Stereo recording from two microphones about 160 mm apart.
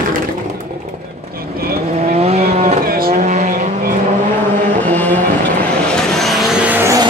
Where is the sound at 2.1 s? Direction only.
40° right (ahead or behind).